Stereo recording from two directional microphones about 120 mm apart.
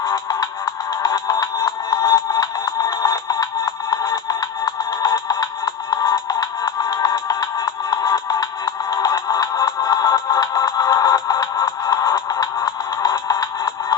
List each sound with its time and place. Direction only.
0.1 s music: 30° left (ahead or behind)